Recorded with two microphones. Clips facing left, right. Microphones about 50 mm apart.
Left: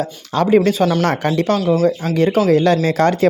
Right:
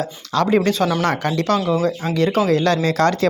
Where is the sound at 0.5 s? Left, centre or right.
Centre.